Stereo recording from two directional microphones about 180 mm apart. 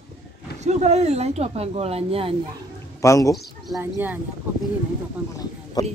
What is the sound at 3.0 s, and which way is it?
Speech, 15° left (ahead or behind).